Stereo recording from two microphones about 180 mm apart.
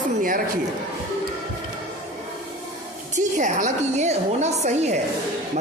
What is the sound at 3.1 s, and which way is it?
A woman's voice, 45° right (ahead or behind).